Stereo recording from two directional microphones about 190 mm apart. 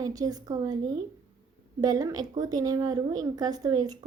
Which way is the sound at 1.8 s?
20° right (ahead or behind).